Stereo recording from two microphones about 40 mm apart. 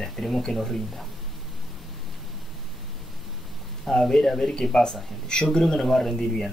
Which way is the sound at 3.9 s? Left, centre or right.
Centre.